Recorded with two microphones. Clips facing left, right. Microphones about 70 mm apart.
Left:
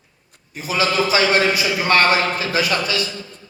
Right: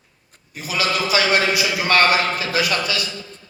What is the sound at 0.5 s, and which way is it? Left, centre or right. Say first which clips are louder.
A man's voice: left 3 dB; left.